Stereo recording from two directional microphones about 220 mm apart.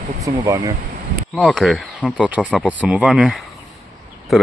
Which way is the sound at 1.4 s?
Centre (ahead or behind).